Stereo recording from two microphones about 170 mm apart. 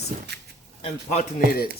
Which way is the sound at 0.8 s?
35° left (ahead or behind).